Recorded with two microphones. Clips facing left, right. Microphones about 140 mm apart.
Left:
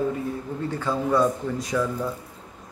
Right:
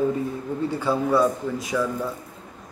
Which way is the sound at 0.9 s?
10° right (ahead or behind).